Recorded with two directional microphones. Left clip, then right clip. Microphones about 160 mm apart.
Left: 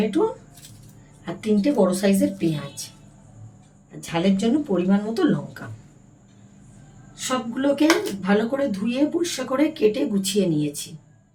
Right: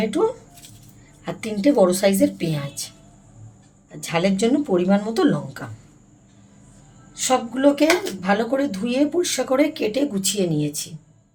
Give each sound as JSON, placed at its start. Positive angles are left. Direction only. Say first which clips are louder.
{"t": 1.2, "sound": "speech", "louder": "right 1 dB", "side_deg": -90}
{"t": 4.0, "sound": "speech", "louder": "right 3 dB", "side_deg": -90}
{"t": 7.2, "sound": "speech", "louder": "right 5 dB", "side_deg": -90}